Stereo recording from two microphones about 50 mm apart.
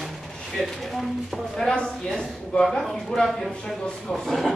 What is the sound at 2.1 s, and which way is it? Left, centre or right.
Speech, centre.